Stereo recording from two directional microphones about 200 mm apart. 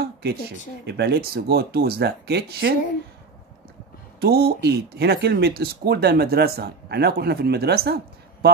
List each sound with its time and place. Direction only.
0.0 s a sound: 55° right (ahead or behind)
0.8 s speech: 55° right (ahead or behind)
4.2 s speech: 50° right (ahead or behind)